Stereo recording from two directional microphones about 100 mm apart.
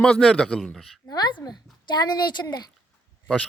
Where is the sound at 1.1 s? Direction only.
45° left (ahead or behind).